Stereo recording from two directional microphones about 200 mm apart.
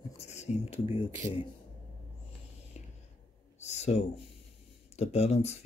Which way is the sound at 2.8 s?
35° left (ahead or behind).